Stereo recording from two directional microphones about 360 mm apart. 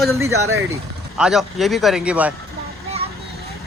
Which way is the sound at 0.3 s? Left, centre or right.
Right.